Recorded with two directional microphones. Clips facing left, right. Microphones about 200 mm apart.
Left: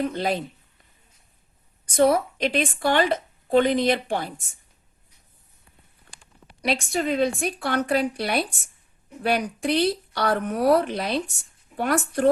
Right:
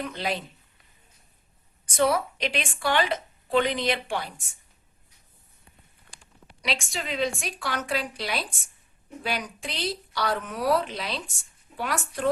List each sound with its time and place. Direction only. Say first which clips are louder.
0.0 s a woman's voice: left 6 dB; 45° left (ahead or behind)
2.0 s a woman's voice: left 5 dB; 50° left (ahead or behind)
6.6 s a woman's voice: left 7 dB; 55° left (ahead or behind)